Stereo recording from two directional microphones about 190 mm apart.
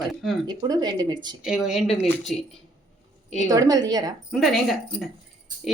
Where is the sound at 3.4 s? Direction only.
20° right (ahead or behind).